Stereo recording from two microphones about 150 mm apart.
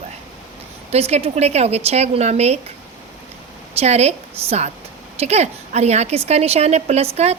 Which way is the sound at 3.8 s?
45° right (ahead or behind).